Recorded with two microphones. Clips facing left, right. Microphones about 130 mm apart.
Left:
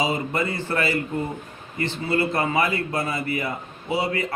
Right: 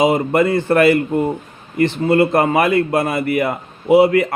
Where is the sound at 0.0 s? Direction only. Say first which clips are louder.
Right 10 dB; 50° right (ahead or behind).